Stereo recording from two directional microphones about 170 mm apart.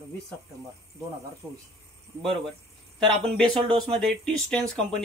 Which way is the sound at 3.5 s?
30° right (ahead or behind).